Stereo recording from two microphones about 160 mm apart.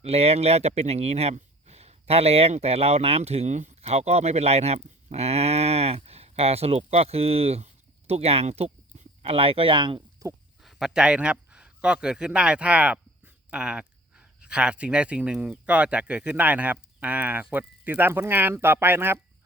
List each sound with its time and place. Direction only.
0.0 s speech: 40° right (ahead or behind)
10.2 s speech: 20° right (ahead or behind)
10.6 s speech: centre (ahead or behind)